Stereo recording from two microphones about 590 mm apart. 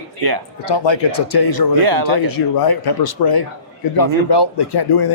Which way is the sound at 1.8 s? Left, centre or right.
Right.